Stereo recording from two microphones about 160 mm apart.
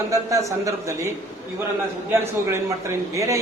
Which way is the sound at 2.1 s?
15° right (ahead or behind).